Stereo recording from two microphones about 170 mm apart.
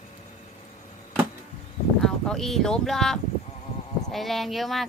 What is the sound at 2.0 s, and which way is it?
A woman's voice, 5° left (ahead or behind).